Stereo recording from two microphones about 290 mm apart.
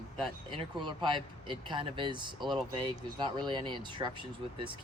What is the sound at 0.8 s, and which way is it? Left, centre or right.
Speech, centre.